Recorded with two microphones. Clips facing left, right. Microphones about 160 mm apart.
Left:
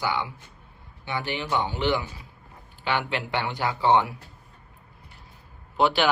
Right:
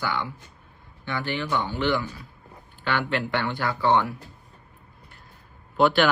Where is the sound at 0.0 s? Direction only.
15° left (ahead or behind).